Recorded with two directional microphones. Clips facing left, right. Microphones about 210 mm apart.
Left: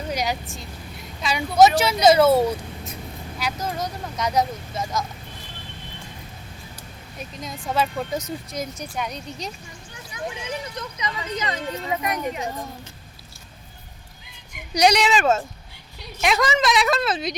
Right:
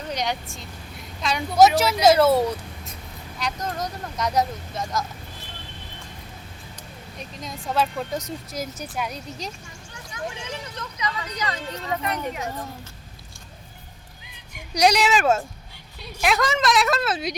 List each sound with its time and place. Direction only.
0.1 s speech: 5° left (ahead or behind)
7.2 s speech: centre (ahead or behind)
10.8 s speech: 20° left (ahead or behind)
11.7 s speech: 10° left (ahead or behind)
14.7 s speech: centre (ahead or behind)